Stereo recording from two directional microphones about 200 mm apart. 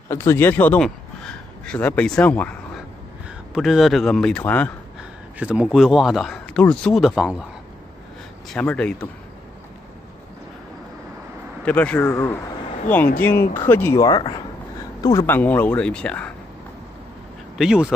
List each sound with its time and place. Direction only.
0.1 s speech: 15° left (ahead or behind)
5.4 s speech: 5° right (ahead or behind)
8.5 s speech: 5° left (ahead or behind)
11.6 s speech: 5° left (ahead or behind)
13.6 s speech: 10° left (ahead or behind)
17.6 s speech: 5° right (ahead or behind)